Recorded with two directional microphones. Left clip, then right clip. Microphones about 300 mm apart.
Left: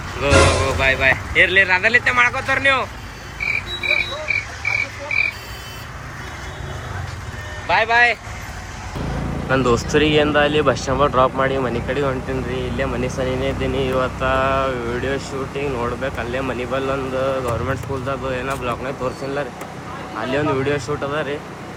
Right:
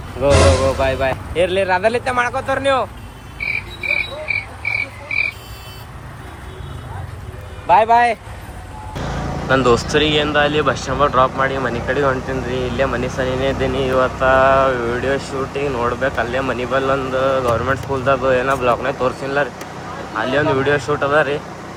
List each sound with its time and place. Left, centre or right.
0.2 s speech: centre
3.4 s frog: centre
7.7 s speech: right
9.5 s speech: centre